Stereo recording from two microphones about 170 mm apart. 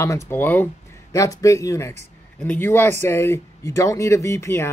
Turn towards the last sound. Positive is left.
turn(degrees=15)  # may be behind; listen again after turning